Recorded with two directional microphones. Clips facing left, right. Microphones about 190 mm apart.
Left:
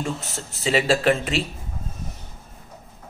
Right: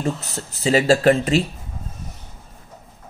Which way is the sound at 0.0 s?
40° right (ahead or behind).